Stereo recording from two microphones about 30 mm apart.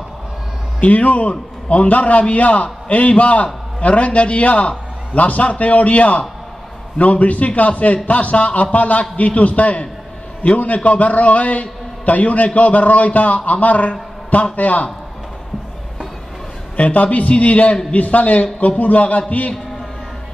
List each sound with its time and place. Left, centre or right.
0.7 s a man's voice: left
16.7 s a man's voice: left